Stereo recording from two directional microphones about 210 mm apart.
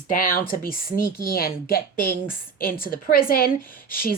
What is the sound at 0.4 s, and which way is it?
Speech, 45° left (ahead or behind).